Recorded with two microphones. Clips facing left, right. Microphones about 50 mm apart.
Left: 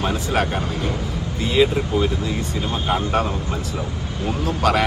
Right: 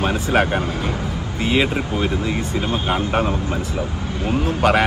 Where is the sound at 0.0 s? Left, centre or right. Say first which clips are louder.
Right 3 dB; right.